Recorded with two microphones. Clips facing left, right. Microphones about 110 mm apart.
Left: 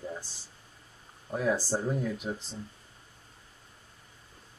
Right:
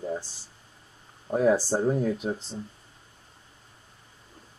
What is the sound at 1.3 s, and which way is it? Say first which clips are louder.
Speech: right 7 dB; 25° right (ahead or behind).